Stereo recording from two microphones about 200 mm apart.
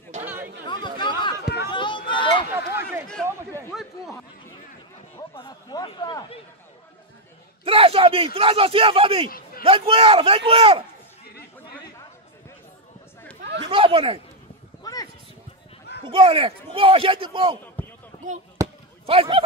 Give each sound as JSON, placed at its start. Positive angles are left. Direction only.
{"t": 0.2, "sound": "chatter", "side_deg": -10}
{"t": 0.7, "sound": "chatter", "side_deg": 25}
{"t": 1.7, "sound": "a sound", "side_deg": 25}
{"t": 3.2, "sound": "a sound", "side_deg": 5}
{"t": 5.3, "sound": "speech", "side_deg": 25}
{"t": 7.6, "sound": "a man's voice", "side_deg": -30}
{"t": 13.7, "sound": "speech", "side_deg": -25}
{"t": 14.8, "sound": "a sound", "side_deg": 20}
{"t": 16.1, "sound": "a man's voice", "side_deg": -25}
{"t": 17.8, "sound": "basketball bounce", "side_deg": 10}
{"t": 18.6, "sound": "basketball bounce", "side_deg": -15}
{"t": 19.0, "sound": "a man's voice", "side_deg": -25}